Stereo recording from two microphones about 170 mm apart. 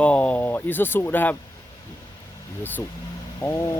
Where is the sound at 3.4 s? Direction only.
15° left (ahead or behind).